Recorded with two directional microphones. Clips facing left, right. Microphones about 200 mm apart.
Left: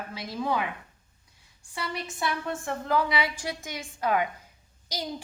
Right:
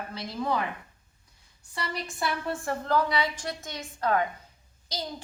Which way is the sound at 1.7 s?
Centre (ahead or behind).